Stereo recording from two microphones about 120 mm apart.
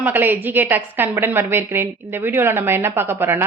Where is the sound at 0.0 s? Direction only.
15° right (ahead or behind).